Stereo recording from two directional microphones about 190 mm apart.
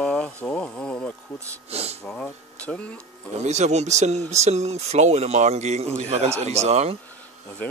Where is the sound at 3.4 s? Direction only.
35° right (ahead or behind).